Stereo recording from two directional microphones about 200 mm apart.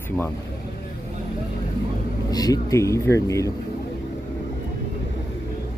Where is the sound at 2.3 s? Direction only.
20° left (ahead or behind).